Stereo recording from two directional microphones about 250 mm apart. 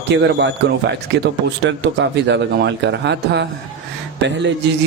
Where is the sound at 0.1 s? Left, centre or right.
Right.